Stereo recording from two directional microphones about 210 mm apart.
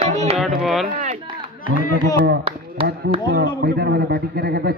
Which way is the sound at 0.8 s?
40° right (ahead or behind).